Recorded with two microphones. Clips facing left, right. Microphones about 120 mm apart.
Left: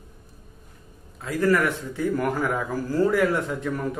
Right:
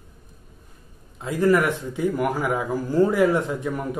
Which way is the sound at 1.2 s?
20° right (ahead or behind).